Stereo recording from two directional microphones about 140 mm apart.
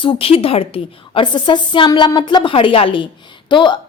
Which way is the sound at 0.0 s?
40° left (ahead or behind).